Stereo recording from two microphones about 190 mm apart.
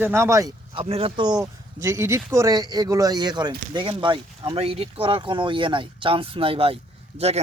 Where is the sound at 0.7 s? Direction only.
30° right (ahead or behind).